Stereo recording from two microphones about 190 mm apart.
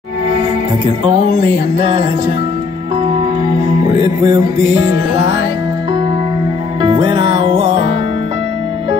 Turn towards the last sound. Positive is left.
turn(degrees=-25)  # may be behind; listen again after turning